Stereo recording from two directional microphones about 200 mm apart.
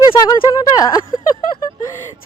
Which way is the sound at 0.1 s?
20° left (ahead or behind).